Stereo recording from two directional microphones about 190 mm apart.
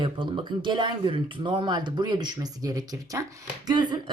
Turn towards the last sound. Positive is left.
turn(degrees=-20)  # may be behind; listen again after turning